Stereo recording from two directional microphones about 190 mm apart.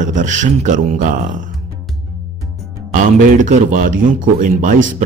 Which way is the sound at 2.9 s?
40° right (ahead or behind).